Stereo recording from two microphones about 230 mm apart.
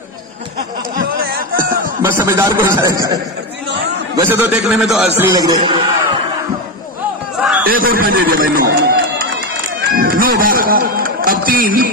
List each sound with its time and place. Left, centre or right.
0.9 s a sound: right
2.0 s speech: centre
4.2 s a man's voice: centre
5.1 s speech: centre
7.6 s a man's voice: right